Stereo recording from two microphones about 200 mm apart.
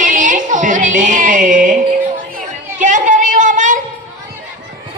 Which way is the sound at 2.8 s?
40° right (ahead or behind).